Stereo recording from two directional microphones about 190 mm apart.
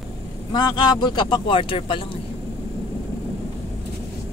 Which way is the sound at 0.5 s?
20° left (ahead or behind).